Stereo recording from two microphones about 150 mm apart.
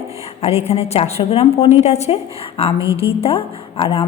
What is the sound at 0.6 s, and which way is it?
A woman's voice, 40° left (ahead or behind).